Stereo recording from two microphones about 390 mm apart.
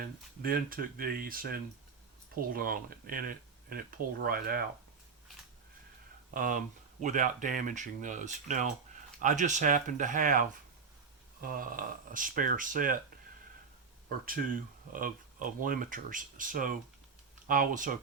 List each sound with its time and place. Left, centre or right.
0.4 s speech: right
6.3 s speech: right
14.3 s speech: right